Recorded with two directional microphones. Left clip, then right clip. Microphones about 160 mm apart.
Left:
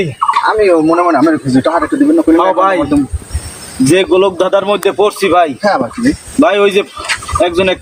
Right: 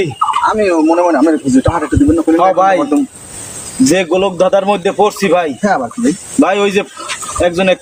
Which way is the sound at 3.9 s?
5° right (ahead or behind).